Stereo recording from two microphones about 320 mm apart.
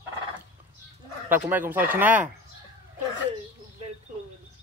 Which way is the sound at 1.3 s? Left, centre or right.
Centre.